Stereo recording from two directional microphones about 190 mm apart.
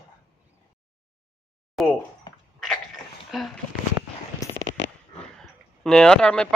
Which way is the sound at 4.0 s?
15° right (ahead or behind).